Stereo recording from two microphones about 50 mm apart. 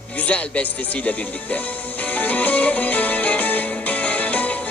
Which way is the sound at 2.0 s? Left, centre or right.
Left.